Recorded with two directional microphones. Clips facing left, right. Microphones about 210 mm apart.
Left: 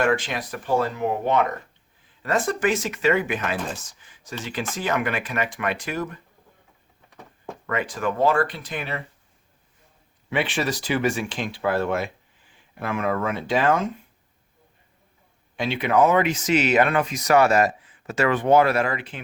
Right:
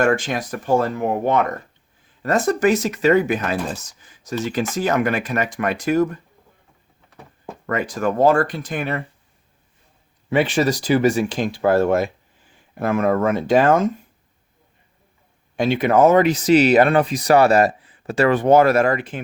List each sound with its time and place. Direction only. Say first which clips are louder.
0.0 s speech: right 4 dB; 45° right (ahead or behind)
7.7 s speech: right 4 dB; 40° right (ahead or behind)
10.2 s speech: right 7 dB; 40° right (ahead or behind)
15.5 s speech: right 5 dB; 45° right (ahead or behind)